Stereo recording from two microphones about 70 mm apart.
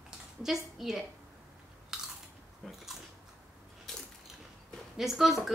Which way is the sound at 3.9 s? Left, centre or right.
Centre.